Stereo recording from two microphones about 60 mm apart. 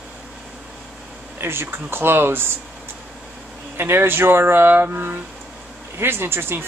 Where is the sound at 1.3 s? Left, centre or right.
Right.